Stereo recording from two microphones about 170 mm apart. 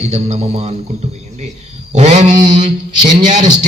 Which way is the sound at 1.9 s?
45° right (ahead or behind).